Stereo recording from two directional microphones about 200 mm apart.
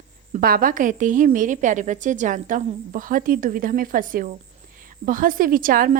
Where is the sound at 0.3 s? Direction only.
45° right (ahead or behind).